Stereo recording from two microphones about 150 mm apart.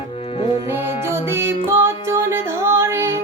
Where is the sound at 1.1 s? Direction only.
15° right (ahead or behind).